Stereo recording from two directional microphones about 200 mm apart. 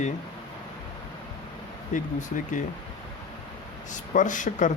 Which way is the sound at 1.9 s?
40° left (ahead or behind).